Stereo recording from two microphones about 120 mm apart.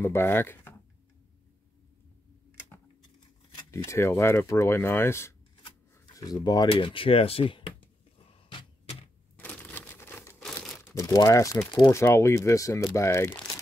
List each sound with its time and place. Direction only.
0.0 s speech: 20° left (ahead or behind)
3.7 s speech: 25° left (ahead or behind)
6.1 s speech: 30° left (ahead or behind)
6.7 s speech: 45° left (ahead or behind)
8.3 s a sound: 50° left (ahead or behind)
9.4 s crumpling: 15° left (ahead or behind)
10.4 s crumpling: 5° left (ahead or behind)
10.9 s speech: 30° left (ahead or behind)